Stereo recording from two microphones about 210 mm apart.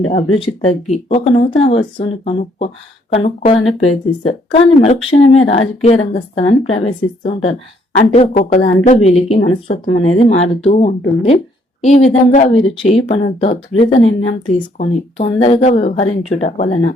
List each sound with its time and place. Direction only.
0.1 s speech: 35° left (ahead or behind)